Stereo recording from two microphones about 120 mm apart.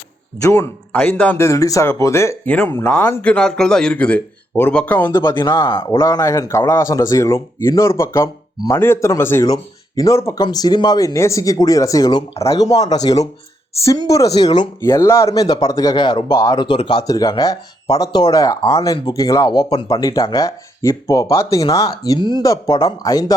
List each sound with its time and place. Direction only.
0.3 s speech: 25° left (ahead or behind)
0.9 s speech: 15° left (ahead or behind)
1.5 s speech: 25° left (ahead or behind)
14.8 s speech: 25° left (ahead or behind)
16.6 s speech: 45° left (ahead or behind)
17.0 s speech: 30° left (ahead or behind)